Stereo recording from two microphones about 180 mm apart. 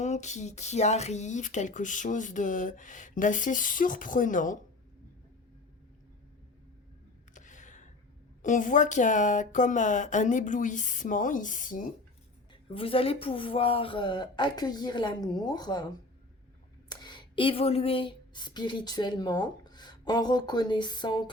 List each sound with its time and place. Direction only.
0.0 s speech: 40° left (ahead or behind)
7.3 s gasp: 45° left (ahead or behind)
8.4 s speech: 45° left (ahead or behind)
12.6 s speech: 30° left (ahead or behind)
16.9 s speech: 25° left (ahead or behind)